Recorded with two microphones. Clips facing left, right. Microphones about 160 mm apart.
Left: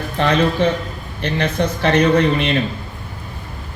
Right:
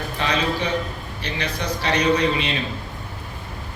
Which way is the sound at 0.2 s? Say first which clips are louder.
Left 8 dB; 55° left (ahead or behind).